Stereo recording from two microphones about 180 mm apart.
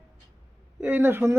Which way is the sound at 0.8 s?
10° right (ahead or behind).